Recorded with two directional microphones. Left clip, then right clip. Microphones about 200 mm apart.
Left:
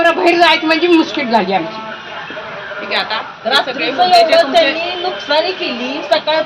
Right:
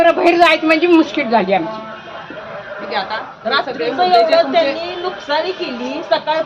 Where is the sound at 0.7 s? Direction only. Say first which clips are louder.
Even; 30° right (ahead or behind).